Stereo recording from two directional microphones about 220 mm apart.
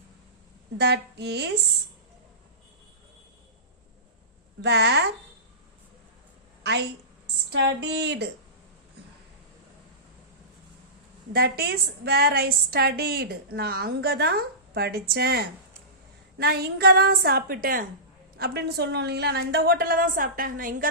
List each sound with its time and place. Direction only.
0.8 s a woman's voice: 50° right (ahead or behind)
4.6 s a woman's voice: 50° right (ahead or behind)
6.6 s a sound: 50° right (ahead or behind)
7.5 s a woman's voice: 50° right (ahead or behind)
11.3 s a woman's voice: 45° right (ahead or behind)